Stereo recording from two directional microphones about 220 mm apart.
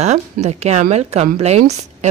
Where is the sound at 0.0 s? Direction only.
30° right (ahead or behind).